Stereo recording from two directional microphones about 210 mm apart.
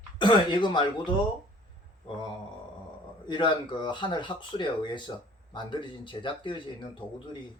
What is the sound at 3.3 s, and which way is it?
Speech, 20° left (ahead or behind).